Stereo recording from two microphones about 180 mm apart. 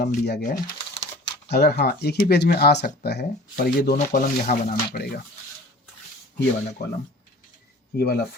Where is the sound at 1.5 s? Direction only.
65° left (ahead or behind).